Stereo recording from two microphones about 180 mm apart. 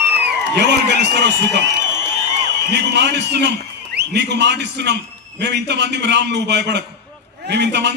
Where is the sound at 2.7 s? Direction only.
70° right (ahead or behind).